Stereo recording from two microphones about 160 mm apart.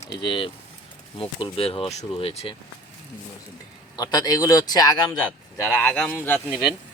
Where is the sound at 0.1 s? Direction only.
30° left (ahead or behind).